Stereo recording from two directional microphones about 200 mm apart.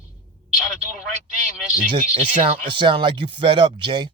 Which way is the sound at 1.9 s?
30° right (ahead or behind).